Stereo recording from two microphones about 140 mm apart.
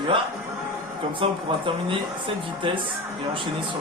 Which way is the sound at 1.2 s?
40° right (ahead or behind).